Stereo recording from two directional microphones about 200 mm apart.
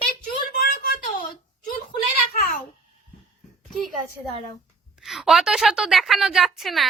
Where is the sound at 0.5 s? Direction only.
45° left (ahead or behind).